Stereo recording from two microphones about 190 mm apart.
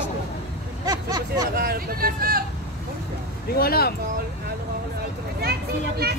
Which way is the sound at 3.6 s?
55° left (ahead or behind).